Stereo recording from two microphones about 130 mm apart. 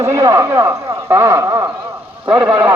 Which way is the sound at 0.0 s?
20° right (ahead or behind).